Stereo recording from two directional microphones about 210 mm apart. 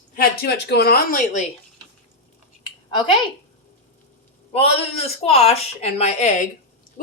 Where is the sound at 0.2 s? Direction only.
50° left (ahead or behind).